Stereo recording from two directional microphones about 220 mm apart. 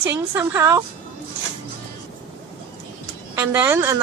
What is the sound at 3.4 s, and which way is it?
Speech, 10° right (ahead or behind).